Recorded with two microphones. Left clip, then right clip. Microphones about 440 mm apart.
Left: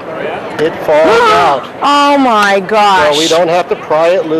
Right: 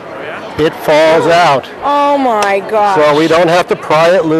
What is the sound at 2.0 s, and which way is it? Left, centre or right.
Speech, left.